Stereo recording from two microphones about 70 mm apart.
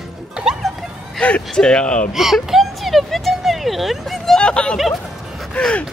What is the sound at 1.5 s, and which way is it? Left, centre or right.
Speech, centre.